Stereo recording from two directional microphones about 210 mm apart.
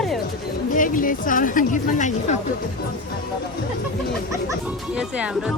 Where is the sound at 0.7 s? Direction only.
40° left (ahead or behind).